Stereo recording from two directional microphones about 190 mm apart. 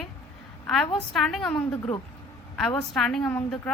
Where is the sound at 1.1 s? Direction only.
Centre (ahead or behind).